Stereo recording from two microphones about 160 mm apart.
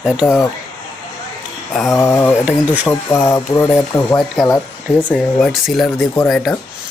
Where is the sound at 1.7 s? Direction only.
Centre (ahead or behind).